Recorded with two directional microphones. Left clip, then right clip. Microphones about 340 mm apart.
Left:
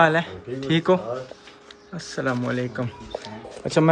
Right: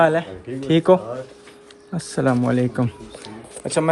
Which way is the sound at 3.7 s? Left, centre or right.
Centre.